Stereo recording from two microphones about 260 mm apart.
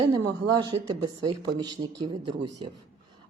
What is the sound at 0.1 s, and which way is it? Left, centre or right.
Speech, centre.